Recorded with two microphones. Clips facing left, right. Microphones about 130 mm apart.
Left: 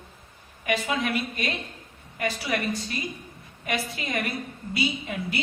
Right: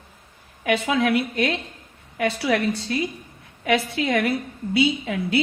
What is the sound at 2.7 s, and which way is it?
A woman's voice, 90° right.